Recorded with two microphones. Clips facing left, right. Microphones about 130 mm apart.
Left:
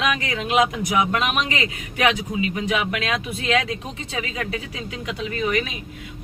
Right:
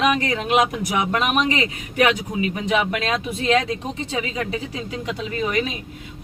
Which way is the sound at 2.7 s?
35° right (ahead or behind).